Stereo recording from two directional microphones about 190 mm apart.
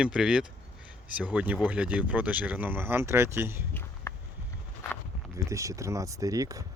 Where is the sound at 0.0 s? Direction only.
5° right (ahead or behind).